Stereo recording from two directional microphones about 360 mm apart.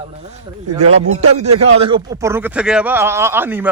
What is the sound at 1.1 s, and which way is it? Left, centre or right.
A man's voice, centre.